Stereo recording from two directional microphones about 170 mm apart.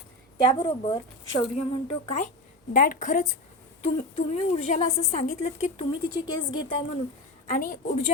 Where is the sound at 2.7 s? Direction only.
50° left (ahead or behind).